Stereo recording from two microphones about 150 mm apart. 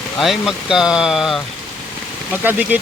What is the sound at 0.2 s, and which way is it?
Speech, centre (ahead or behind).